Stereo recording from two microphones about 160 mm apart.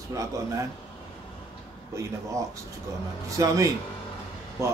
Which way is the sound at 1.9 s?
20° right (ahead or behind).